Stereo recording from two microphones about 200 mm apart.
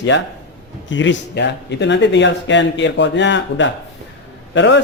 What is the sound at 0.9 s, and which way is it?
Speech, 65° left (ahead or behind).